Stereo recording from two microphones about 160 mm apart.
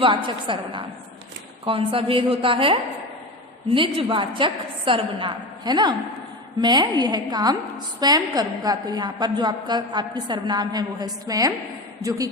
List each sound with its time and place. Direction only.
0.0 s a woman's voice: 30° right (ahead or behind)
3.8 s a woman's voice: 30° right (ahead or behind)